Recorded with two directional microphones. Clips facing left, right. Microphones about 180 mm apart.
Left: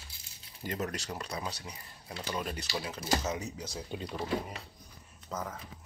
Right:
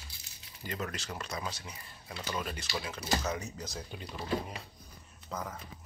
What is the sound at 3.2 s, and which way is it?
Speech, 20° left (ahead or behind).